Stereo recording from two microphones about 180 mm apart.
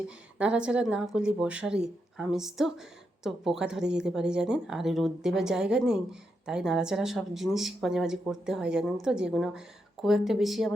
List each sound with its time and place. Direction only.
0.3 s speech: 5° right (ahead or behind)